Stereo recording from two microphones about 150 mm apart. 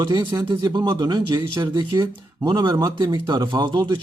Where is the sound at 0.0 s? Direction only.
30° right (ahead or behind).